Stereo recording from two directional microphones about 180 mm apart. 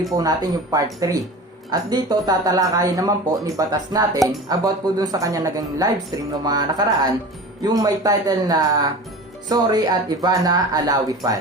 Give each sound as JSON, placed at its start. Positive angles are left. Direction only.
{"t": 0.2, "sound": "speech", "side_deg": -20}